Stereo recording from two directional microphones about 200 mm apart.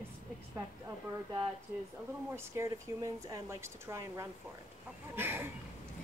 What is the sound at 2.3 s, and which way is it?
Speech, 15° right (ahead or behind).